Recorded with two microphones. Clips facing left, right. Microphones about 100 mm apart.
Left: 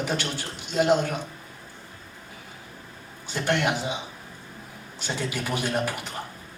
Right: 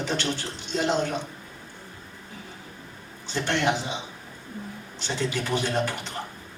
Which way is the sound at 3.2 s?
10° left (ahead or behind).